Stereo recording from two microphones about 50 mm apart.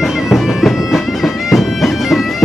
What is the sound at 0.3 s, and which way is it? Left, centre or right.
Bagpipes, centre.